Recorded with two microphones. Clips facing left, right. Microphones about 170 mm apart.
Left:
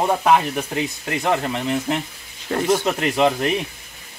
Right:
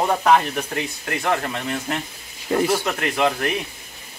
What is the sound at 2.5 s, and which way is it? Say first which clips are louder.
Speech: even; 10° right (ahead or behind).